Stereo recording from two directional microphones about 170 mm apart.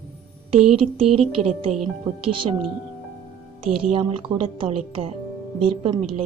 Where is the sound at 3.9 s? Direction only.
35° right (ahead or behind).